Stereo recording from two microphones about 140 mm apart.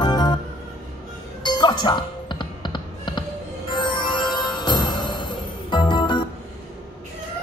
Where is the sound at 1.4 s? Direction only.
30° left (ahead or behind).